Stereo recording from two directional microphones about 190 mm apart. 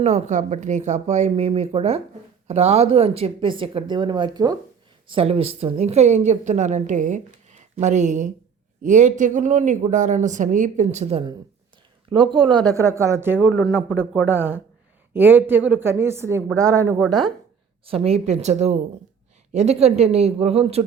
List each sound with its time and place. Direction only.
0.0 s a woman's voice: 35° right (ahead or behind); by 17.0 s 15° right (ahead or behind)
17.8 s a woman's voice: 30° right (ahead or behind)